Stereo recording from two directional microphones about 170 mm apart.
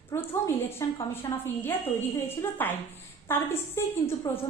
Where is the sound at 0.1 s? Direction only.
15° left (ahead or behind).